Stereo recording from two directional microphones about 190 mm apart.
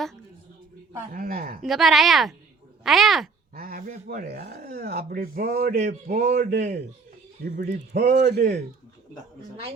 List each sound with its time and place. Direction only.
1.1 s speech: 50° right (ahead or behind)
1.6 s speech: centre (ahead or behind)
3.5 s a man's voice: 50° right (ahead or behind)
7.5 s speech: 45° right (ahead or behind)